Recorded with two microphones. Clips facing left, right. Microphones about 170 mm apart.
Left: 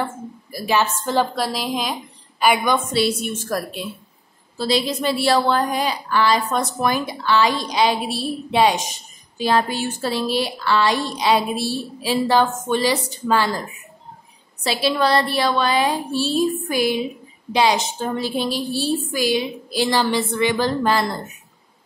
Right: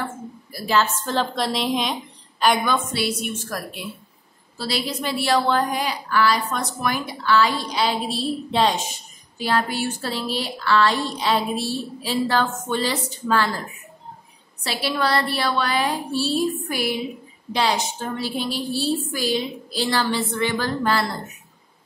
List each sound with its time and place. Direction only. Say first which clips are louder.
0.5 s a woman's voice: left 1 dB; 15° left (ahead or behind)
2.4 s a woman's voice: left 2 dB; 10° left (ahead or behind); by 3.5 s 30° left (ahead or behind)
4.6 s a woman's voice: left 6 dB; 20° left (ahead or behind)
14.6 s speech: left 4 dB; 15° left (ahead or behind)